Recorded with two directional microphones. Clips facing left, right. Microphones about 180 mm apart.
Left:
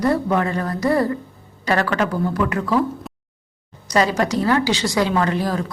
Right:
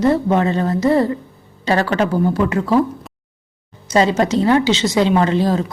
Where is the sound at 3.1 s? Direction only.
Centre (ahead or behind).